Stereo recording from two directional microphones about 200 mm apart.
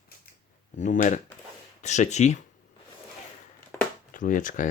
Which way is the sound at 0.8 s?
40° left (ahead or behind).